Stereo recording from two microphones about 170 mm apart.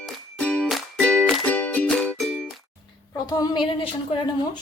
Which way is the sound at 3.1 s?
20° left (ahead or behind).